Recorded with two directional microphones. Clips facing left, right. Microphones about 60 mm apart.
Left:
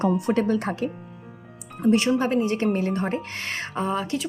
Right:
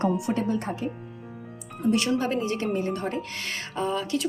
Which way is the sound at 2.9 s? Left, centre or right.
Left.